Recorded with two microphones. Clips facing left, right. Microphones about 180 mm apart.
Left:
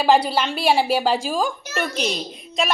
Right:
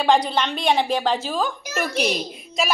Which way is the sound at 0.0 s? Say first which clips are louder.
Left 1 dB; 5° left (ahead or behind).